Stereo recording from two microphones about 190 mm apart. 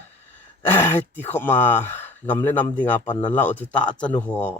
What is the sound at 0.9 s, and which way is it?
A man's voice, 10° left (ahead or behind).